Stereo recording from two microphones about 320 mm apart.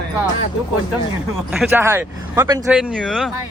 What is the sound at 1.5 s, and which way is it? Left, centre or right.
Speech, centre.